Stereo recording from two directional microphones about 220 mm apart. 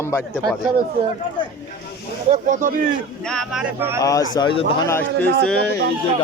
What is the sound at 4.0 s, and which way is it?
Speech, 15° left (ahead or behind).